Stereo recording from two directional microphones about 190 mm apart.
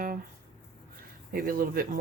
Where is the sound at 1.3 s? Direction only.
50° right (ahead or behind).